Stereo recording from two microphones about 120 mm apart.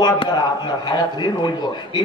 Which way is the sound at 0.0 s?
35° left (ahead or behind).